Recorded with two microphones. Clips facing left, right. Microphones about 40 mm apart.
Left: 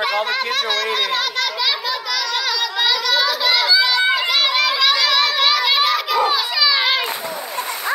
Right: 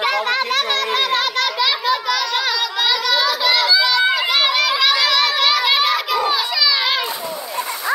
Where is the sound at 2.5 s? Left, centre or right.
Centre.